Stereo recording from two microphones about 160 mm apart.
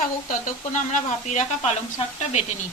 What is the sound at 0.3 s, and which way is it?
Speech, 50° left (ahead or behind).